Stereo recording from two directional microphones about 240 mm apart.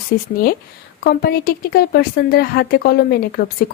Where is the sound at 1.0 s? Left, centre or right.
Left.